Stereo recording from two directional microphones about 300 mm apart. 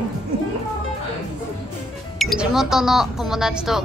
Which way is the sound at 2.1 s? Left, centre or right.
Centre.